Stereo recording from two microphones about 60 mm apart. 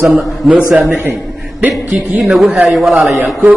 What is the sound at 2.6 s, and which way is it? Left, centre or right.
Speech, centre.